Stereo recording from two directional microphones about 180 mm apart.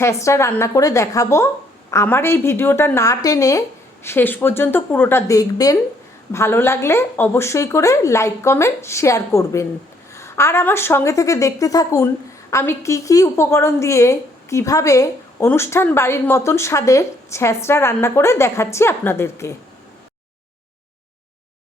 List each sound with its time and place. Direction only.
0.0 s a woman's voice: 15° left (ahead or behind)